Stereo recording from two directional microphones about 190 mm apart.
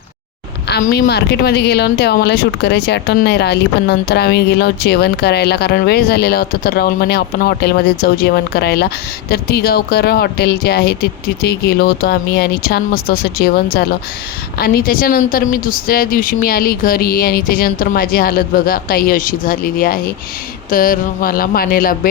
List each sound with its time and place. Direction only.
0.8 s a woman's voice: 60° left (ahead or behind)